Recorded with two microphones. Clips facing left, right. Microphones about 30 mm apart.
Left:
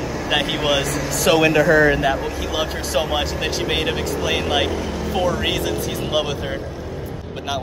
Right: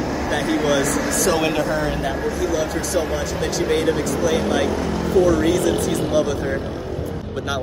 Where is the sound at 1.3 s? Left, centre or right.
Left.